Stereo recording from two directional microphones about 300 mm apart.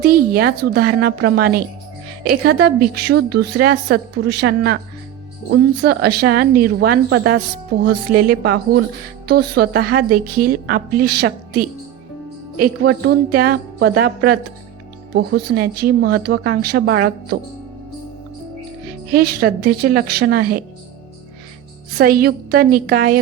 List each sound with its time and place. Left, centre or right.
0.0 s a woman's voice: right
19.1 s a woman's voice: right
21.9 s a woman's voice: right